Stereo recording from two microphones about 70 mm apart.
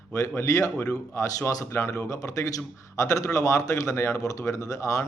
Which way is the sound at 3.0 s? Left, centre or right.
Left.